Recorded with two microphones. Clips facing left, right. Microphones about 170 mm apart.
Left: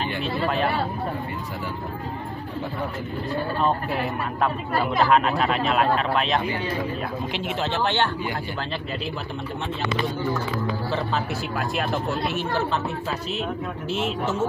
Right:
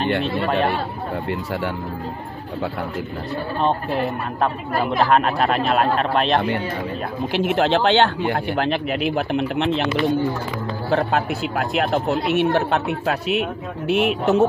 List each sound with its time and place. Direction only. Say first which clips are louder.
0.0 s speech: right 5 dB; 65° right (ahead or behind)
5.1 s speech: right 3 dB; 50° right (ahead or behind)
7.4 s speech: right 8 dB; 75° right (ahead or behind)
10.9 s speech: right 6 dB; 60° right (ahead or behind)